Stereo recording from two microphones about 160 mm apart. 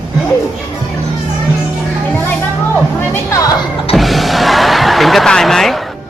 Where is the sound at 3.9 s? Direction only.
Centre (ahead or behind).